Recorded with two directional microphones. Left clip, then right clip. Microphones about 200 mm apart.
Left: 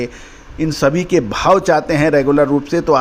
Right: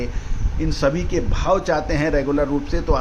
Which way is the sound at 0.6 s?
35° left (ahead or behind).